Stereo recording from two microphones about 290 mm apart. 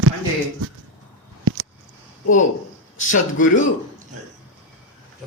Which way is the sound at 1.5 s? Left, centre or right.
Right.